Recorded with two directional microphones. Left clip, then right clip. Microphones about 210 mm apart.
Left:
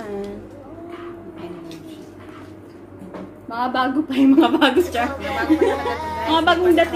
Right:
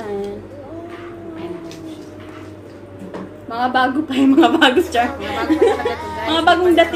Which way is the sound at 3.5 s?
5° right (ahead or behind).